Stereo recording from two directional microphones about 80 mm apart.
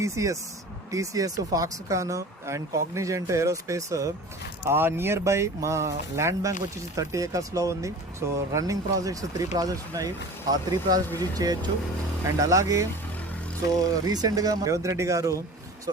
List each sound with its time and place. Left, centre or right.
0.0 s speech: right
4.7 s speech: right